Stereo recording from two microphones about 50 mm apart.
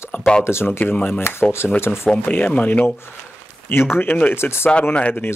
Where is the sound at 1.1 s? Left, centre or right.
Left.